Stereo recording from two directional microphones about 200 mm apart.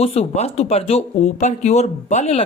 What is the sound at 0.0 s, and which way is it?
Speech, 30° left (ahead or behind).